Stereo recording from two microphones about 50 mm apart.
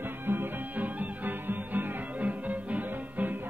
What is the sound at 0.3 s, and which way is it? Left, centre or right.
Music, right.